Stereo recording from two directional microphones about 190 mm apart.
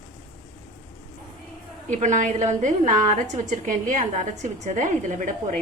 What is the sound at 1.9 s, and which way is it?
A woman's voice, 40° right (ahead or behind).